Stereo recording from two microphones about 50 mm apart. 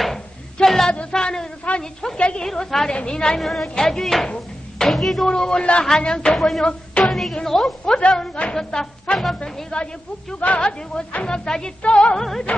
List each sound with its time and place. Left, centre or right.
0.7 s a sound: centre
1.1 s a man's voice: centre
2.4 s speech: centre
3.3 s a woman's voice: centre
5.3 s speech: centre
6.6 s a sound: left
7.1 s a woman's voice: centre
8.0 s speech: centre
12.2 s speech: centre